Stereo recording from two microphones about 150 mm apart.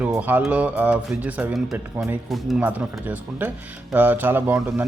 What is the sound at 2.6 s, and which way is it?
Speech, 10° right (ahead or behind).